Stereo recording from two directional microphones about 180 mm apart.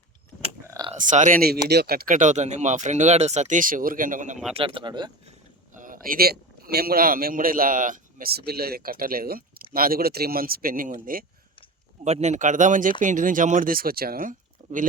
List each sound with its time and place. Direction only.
0.7 s a sound: 20° right (ahead or behind)
1.0 s a man's voice: 45° right (ahead or behind)
1.6 s a man's voice: 60° right (ahead or behind); by 4.4 s 45° right (ahead or behind)
4.5 s speech: 30° right (ahead or behind)
5.7 s a man's voice: 50° right (ahead or behind)
12.0 s a man's voice: 40° right (ahead or behind)